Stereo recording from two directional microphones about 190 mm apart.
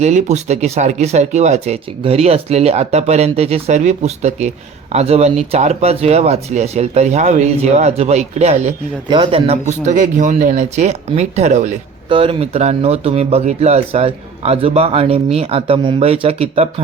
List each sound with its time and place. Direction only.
0.0 s speech: 40° right (ahead or behind)